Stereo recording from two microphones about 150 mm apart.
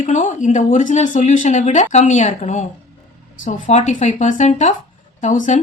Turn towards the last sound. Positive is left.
turn(degrees=55)  # may be behind; listen again after turning